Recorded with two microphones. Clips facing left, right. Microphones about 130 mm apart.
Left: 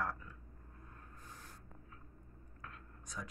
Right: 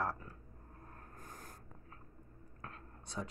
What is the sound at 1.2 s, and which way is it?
Writing, 45° right (ahead or behind).